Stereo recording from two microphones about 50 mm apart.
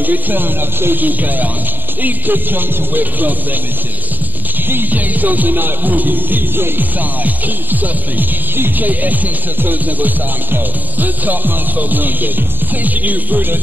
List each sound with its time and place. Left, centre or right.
0.0 s music: right
4.6 s music: right